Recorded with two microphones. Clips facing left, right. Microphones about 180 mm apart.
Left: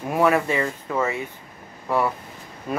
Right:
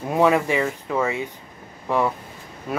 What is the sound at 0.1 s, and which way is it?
Speech, 15° right (ahead or behind).